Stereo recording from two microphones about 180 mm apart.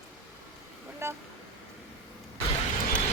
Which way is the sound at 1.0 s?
15° right (ahead or behind).